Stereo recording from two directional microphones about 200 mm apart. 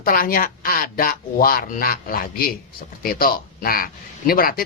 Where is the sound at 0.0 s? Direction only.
45° left (ahead or behind).